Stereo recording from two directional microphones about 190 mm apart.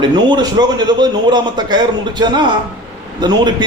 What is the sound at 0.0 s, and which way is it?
A man's voice, 25° right (ahead or behind).